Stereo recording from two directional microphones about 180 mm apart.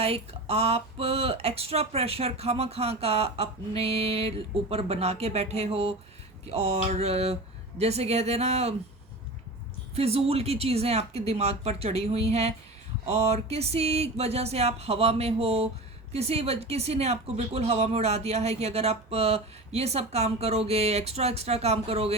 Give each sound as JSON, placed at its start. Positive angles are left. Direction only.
{"t": 0.0, "sound": "speech", "side_deg": -35}
{"t": 9.9, "sound": "speech", "side_deg": -35}